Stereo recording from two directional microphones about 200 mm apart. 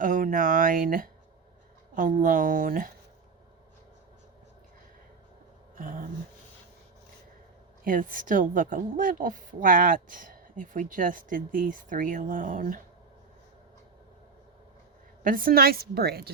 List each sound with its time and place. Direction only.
0.0 s a woman's voice: 45° right (ahead or behind)
5.7 s a sound: 40° right (ahead or behind)
7.9 s a woman's voice: 40° right (ahead or behind)
15.2 s a woman's voice: 45° right (ahead or behind)